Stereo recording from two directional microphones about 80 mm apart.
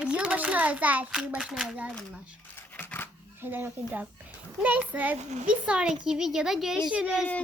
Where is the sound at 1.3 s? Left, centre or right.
Centre.